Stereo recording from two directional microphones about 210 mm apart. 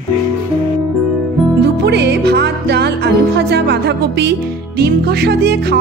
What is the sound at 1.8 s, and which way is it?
Music, 55° right (ahead or behind).